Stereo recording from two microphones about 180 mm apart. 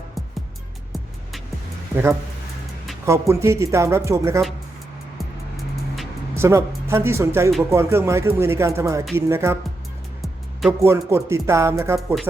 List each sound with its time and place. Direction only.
3.1 s speech: 15° right (ahead or behind)
6.3 s speech: 15° right (ahead or behind)
10.7 s speech: 15° right (ahead or behind)